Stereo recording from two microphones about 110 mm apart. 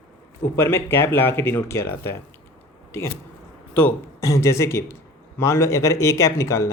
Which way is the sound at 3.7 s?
25° left (ahead or behind).